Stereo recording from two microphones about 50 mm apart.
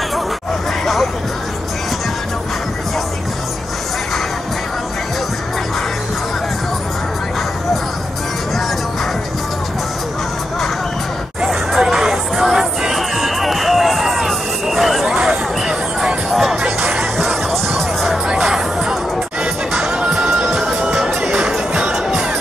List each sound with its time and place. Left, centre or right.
11.4 s music: centre
18.3 s music: centre
20.5 s music: centre